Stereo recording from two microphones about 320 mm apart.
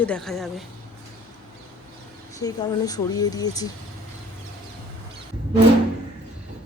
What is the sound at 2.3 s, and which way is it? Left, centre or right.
A woman's voice, centre.